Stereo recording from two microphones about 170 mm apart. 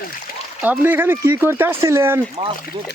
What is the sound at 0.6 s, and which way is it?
Speech, 10° right (ahead or behind).